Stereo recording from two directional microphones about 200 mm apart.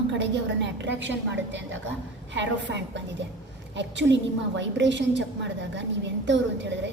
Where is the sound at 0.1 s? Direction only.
60° right (ahead or behind).